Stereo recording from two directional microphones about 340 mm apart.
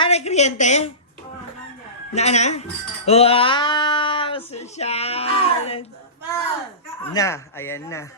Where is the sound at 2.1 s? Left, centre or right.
Centre.